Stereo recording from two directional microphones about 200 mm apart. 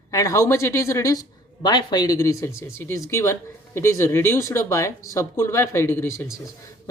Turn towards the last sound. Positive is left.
turn(degrees=15)  # may be behind; listen again after turning